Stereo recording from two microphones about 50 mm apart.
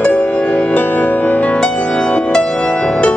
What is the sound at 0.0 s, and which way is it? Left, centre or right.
Music, left.